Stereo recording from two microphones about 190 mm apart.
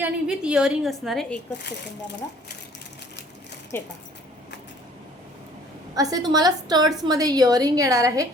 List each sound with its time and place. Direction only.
0.0 s a woman's voice: 5° right (ahead or behind)
3.7 s speech: 10° left (ahead or behind)
5.9 s a woman's voice: 20° right (ahead or behind)